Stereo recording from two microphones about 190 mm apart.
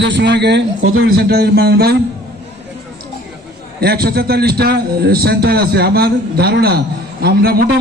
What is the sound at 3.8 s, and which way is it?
A man's voice, 55° right (ahead or behind).